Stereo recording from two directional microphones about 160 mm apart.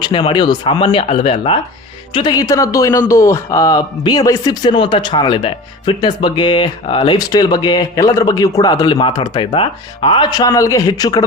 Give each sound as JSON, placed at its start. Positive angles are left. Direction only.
{"t": 0.0, "sound": "speech", "side_deg": 30}